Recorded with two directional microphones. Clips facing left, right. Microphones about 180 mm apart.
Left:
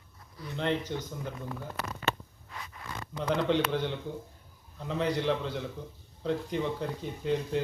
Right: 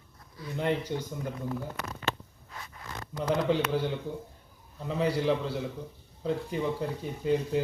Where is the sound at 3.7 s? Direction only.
5° right (ahead or behind).